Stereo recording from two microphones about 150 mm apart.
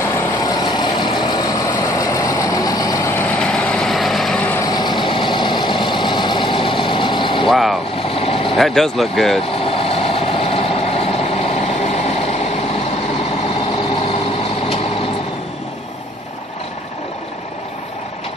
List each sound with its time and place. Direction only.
0.4 s vehicle: 30° left (ahead or behind)
3.3 s vehicle: 5° left (ahead or behind)
4.6 s vehicle: 25° left (ahead or behind)
7.4 s vehicle: centre (ahead or behind)
8.2 s vehicle: 40° left (ahead or behind)
8.5 s speech: centre (ahead or behind)
9.7 s vehicle: 40° left (ahead or behind)